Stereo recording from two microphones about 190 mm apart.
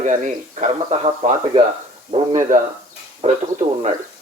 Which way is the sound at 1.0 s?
25° right (ahead or behind).